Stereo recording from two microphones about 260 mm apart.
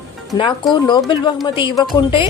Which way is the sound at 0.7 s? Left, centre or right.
Centre.